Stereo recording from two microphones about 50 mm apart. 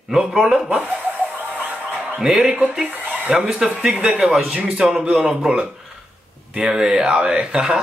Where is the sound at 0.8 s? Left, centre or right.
Right.